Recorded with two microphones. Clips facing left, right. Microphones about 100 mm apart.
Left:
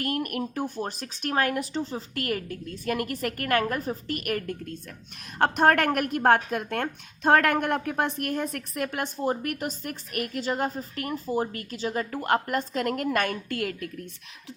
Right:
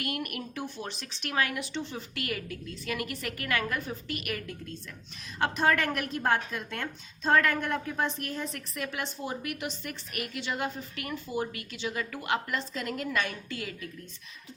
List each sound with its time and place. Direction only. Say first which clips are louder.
0.0 s speech: left 6 dB; 40° left (ahead or behind)